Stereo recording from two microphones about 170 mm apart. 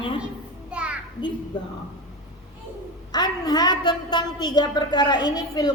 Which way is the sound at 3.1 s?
25° left (ahead or behind).